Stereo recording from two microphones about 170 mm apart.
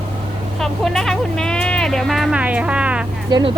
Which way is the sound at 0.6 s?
Centre (ahead or behind).